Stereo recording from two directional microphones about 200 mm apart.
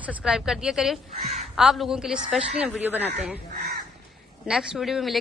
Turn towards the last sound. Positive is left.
turn(degrees=0)  # may be behind; listen again after turning